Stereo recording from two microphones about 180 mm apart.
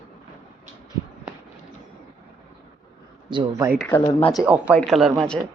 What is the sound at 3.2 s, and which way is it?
Speech, 25° right (ahead or behind).